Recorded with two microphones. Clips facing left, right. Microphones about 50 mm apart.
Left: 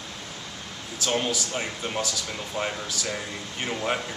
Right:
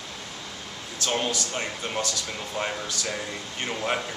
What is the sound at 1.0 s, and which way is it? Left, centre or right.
Speech, centre.